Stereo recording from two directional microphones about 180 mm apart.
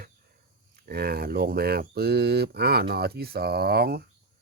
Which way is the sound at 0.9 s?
60° right (ahead or behind).